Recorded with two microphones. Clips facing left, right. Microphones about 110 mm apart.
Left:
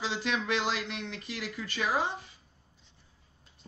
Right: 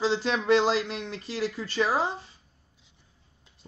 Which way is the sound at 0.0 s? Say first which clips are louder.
Right 6 dB; 35° right (ahead or behind).